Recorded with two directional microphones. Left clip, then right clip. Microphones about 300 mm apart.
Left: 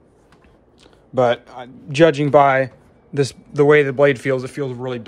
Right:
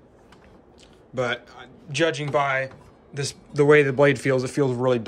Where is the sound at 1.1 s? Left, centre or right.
Centre.